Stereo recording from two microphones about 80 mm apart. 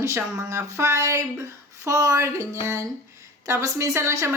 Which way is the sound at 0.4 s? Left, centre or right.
Right.